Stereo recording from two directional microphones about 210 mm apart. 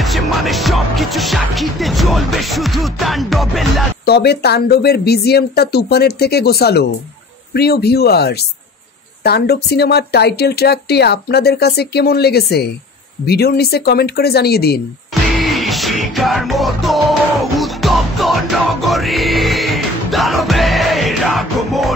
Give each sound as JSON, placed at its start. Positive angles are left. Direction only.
{"t": 0.0, "sound": "music", "side_deg": 0}
{"t": 4.0, "sound": "speech", "side_deg": 50}
{"t": 15.4, "sound": "music", "side_deg": 0}